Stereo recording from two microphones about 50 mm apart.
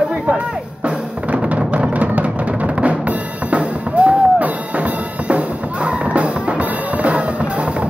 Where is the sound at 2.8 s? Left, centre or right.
Right.